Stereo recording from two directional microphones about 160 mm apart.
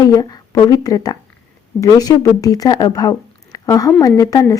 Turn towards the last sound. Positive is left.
turn(degrees=20)  # may be behind; listen again after turning